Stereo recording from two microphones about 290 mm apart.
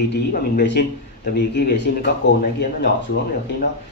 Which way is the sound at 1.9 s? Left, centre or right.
Left.